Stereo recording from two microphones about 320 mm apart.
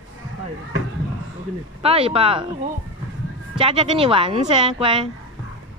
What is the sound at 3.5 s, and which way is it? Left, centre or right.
Speech, centre.